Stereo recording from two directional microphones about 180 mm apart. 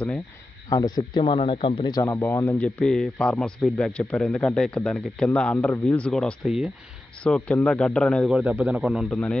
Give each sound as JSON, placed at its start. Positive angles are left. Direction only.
{"t": 0.7, "sound": "speech", "side_deg": 20}